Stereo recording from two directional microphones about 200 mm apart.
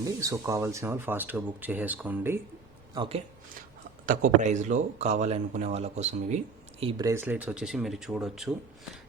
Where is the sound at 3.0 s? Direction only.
30° right (ahead or behind).